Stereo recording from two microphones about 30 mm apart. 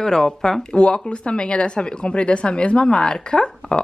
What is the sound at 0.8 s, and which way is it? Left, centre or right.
Speech, left.